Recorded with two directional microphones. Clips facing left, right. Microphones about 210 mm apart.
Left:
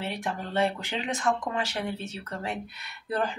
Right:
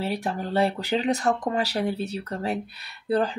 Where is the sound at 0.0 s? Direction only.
35° right (ahead or behind).